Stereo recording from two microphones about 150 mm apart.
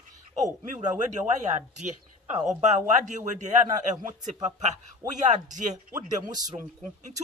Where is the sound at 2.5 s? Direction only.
50° right (ahead or behind).